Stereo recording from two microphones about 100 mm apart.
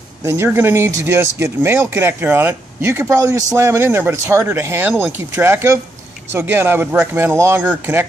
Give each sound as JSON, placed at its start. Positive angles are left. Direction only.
{"t": 0.2, "sound": "speech", "side_deg": -25}